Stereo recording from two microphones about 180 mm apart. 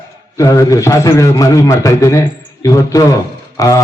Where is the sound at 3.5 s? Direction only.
20° left (ahead or behind).